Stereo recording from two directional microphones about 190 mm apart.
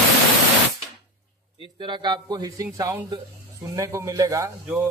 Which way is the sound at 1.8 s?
25° right (ahead or behind).